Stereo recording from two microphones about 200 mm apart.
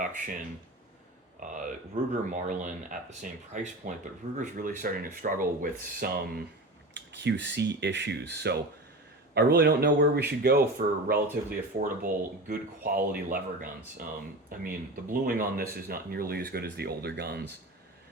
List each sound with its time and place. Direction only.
0.0 s speech: 40° right (ahead or behind)